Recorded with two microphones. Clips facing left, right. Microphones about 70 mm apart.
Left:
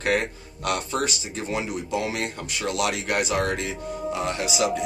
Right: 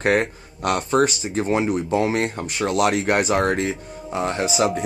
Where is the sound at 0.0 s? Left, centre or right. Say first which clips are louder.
Right 5 dB; right.